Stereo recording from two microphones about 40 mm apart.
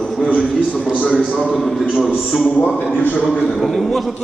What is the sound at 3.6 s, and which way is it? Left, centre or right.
Speech, centre.